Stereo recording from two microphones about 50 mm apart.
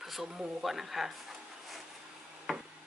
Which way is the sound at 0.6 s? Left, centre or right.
Centre.